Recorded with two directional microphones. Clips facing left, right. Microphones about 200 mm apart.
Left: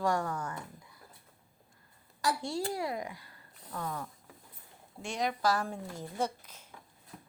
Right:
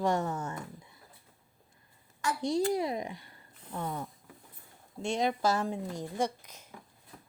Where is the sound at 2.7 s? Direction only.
20° right (ahead or behind).